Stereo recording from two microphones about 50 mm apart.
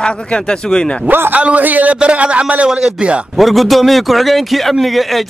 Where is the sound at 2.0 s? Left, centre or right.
Right.